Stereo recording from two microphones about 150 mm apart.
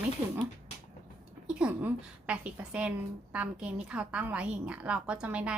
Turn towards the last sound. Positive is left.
turn(degrees=-10)  # may be behind; listen again after turning